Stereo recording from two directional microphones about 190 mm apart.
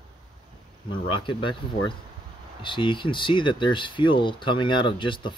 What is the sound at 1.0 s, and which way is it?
Speech, 25° left (ahead or behind).